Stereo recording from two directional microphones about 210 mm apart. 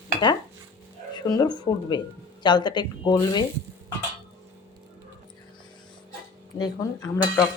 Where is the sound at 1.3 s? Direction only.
20° left (ahead or behind).